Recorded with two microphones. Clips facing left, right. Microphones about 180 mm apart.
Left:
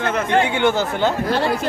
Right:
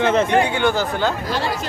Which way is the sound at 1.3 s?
60° left (ahead or behind).